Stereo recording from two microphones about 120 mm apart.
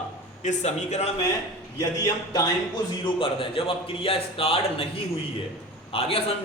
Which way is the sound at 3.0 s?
50° left (ahead or behind).